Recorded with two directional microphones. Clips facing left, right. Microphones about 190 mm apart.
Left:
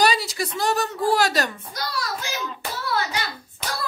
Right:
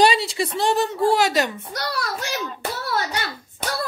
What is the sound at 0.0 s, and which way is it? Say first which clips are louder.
A woman's voice: right 3 dB; 25° right (ahead or behind).